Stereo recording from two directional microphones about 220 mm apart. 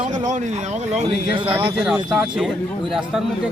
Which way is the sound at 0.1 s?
35° right (ahead or behind).